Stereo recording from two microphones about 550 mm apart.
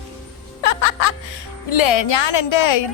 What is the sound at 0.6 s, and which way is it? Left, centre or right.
Music, left.